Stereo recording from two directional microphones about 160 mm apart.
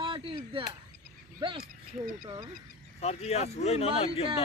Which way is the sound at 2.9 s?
40° left (ahead or behind).